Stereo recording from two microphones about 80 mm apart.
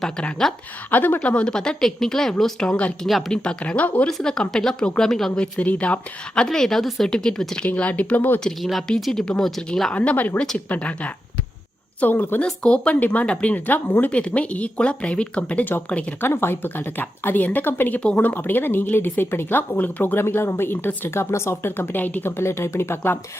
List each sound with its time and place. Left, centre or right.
0.0 s speech: centre
0.9 s speech: left
3.1 s speech: centre
3.3 s speech: centre
8.9 s speech: centre
9.9 s speech: centre
16.2 s speech: left